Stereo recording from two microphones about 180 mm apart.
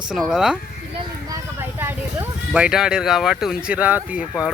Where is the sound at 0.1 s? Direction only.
Centre (ahead or behind).